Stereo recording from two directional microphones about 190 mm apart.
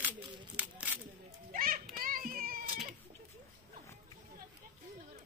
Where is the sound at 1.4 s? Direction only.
45° right (ahead or behind).